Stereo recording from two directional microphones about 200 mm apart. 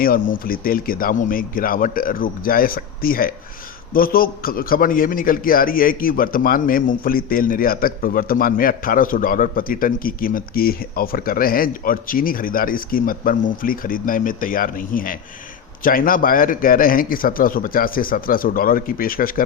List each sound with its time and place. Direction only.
0.0 s a man's voice: 45° left (ahead or behind)